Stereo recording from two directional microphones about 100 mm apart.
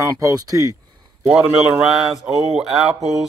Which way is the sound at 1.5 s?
Centre (ahead or behind).